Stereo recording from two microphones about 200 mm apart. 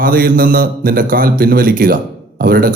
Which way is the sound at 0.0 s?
45° right (ahead or behind).